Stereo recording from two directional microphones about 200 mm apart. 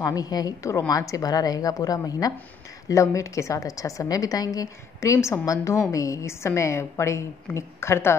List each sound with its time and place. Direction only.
0.0 s a woman's voice: 20° left (ahead or behind)